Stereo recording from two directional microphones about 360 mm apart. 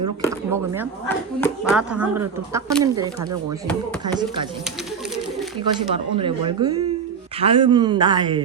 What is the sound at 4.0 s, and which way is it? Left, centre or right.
Speech, centre.